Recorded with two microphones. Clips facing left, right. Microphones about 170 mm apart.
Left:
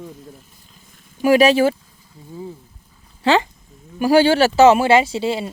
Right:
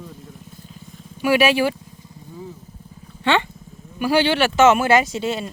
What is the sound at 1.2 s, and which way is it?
Speech, 35° left (ahead or behind).